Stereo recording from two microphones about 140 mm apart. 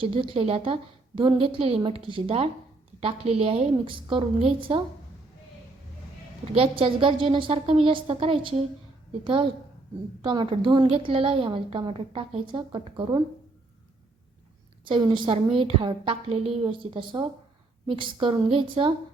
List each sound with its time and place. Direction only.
0.0 s a woman's voice: 40° right (ahead or behind)
6.6 s a woman's voice: 40° right (ahead or behind)
14.8 s a woman's voice: 35° right (ahead or behind)